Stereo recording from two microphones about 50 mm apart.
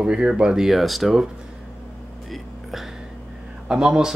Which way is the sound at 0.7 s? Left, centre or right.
Centre.